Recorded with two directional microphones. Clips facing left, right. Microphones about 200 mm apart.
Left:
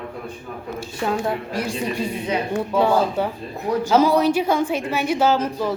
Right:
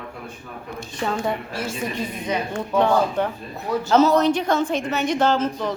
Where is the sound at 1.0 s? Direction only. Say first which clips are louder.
Left 1 dB; 5° left (ahead or behind).